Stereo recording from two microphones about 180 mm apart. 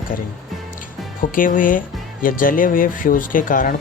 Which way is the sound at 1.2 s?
50° left (ahead or behind).